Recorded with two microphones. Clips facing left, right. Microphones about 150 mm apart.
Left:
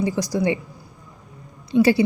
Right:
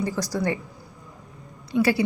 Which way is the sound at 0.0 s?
15° left (ahead or behind).